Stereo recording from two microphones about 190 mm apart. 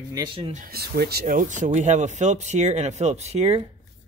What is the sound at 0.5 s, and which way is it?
Speech, 50° right (ahead or behind).